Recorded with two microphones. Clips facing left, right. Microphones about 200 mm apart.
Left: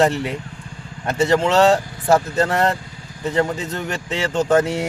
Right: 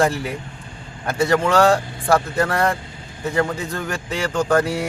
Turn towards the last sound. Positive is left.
turn(degrees=20)  # may be behind; listen again after turning